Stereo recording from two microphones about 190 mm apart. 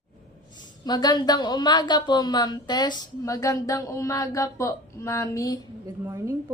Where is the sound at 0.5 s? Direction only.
20° left (ahead or behind).